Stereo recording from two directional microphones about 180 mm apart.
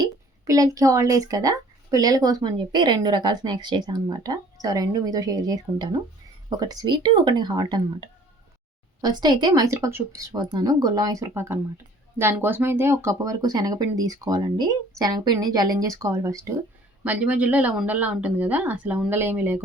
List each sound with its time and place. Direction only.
0.0 s speech: 20° right (ahead or behind)